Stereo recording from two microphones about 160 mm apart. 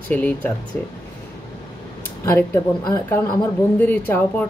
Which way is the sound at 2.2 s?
15° left (ahead or behind).